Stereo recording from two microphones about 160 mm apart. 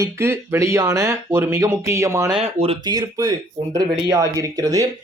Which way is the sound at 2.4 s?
40° right (ahead or behind).